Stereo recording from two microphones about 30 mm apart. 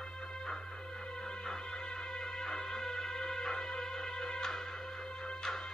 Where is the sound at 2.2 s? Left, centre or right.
Centre.